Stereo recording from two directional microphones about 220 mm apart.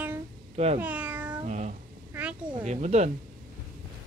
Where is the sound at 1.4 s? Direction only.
30° right (ahead or behind).